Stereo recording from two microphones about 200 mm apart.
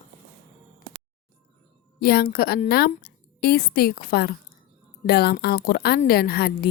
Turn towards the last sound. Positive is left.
turn(degrees=50)  # may be behind; listen again after turning